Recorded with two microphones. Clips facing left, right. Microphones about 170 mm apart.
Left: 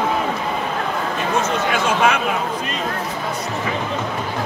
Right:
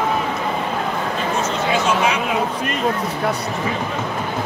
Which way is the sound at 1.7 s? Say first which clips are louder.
Even; 55° left (ahead or behind).